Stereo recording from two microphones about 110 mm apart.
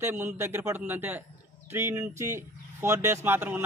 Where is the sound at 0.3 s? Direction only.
25° right (ahead or behind).